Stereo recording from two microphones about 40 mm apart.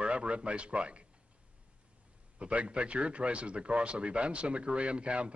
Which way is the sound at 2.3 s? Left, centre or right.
Right.